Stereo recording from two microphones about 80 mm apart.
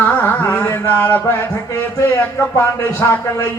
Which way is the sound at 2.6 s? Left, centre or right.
Left.